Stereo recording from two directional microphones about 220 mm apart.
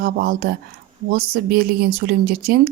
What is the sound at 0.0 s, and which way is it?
A woman's voice, 40° right (ahead or behind).